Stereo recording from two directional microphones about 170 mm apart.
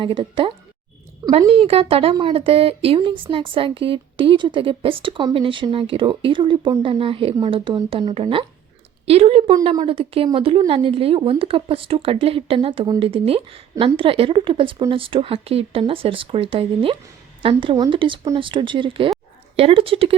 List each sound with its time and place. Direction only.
0.0 s a woman's voice: 30° right (ahead or behind)